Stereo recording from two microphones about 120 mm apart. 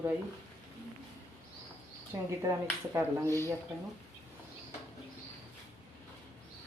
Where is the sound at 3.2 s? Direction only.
20° left (ahead or behind).